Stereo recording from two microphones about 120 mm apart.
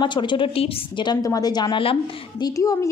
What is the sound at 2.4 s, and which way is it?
Speech, 30° left (ahead or behind).